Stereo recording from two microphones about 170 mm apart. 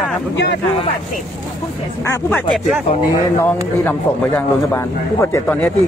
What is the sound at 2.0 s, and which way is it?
Speech, 15° left (ahead or behind).